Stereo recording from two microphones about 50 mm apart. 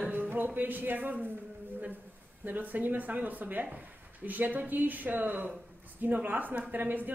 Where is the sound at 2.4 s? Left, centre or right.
Right.